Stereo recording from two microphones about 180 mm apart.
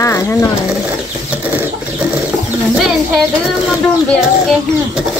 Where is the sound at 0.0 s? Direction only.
15° left (ahead or behind).